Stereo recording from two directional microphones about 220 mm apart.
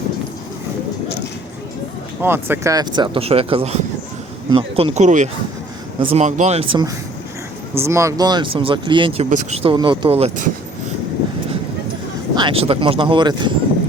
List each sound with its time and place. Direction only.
2.2 s speech: 10° right (ahead or behind); by 10.5 s 25° right (ahead or behind)
12.3 s speech: 20° right (ahead or behind)